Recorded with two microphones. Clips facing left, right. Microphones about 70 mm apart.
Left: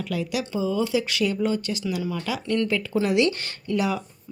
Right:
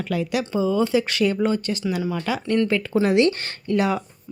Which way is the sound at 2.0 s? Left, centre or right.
Right.